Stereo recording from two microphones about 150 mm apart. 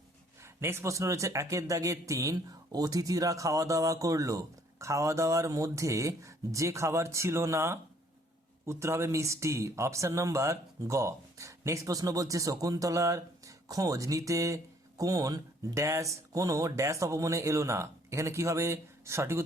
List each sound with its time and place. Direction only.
0.4 s speech: 15° right (ahead or behind)